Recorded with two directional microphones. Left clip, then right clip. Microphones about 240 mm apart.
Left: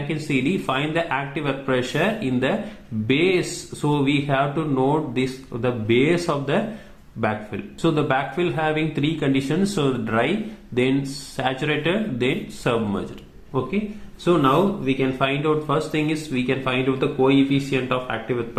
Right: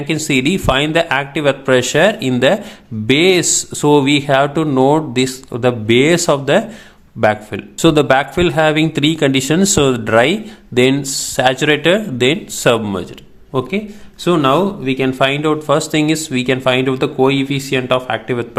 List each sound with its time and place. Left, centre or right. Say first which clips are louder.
0.1 s speech: right 8 dB; right
11.3 s speech: right 10 dB; right
14.3 s speech: right 5 dB; right